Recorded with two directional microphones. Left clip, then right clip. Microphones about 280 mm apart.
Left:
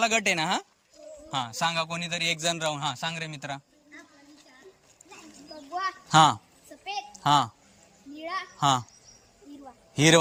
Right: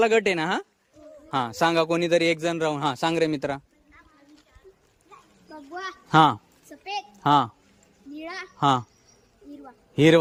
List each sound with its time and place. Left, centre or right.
0.0 s a man's voice: centre
5.8 s a sound: centre
9.9 s a man's voice: centre